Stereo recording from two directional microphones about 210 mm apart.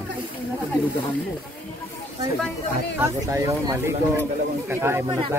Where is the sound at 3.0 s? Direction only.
15° right (ahead or behind).